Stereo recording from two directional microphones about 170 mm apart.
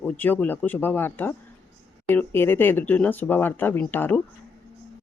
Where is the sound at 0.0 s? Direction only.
10° left (ahead or behind).